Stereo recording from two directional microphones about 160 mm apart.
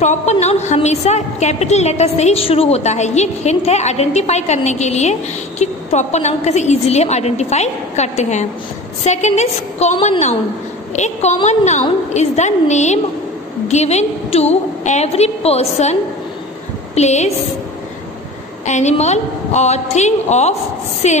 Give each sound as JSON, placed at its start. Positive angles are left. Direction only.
{"t": 0.0, "sound": "a woman's voice", "side_deg": 45}
{"t": 18.7, "sound": "a woman's voice", "side_deg": 45}